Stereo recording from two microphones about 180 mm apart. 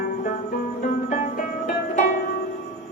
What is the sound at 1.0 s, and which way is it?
Music, 45° left (ahead or behind).